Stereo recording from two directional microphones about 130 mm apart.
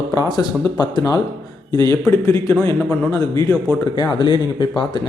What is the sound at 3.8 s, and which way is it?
Speech, 35° left (ahead or behind).